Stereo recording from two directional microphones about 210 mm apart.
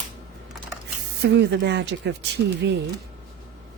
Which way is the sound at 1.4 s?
55° right (ahead or behind).